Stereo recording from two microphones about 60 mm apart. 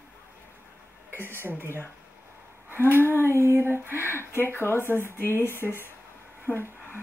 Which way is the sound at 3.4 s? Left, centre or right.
Right.